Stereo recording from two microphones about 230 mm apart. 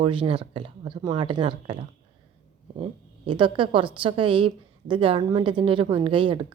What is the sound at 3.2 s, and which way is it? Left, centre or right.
A woman's voice, right.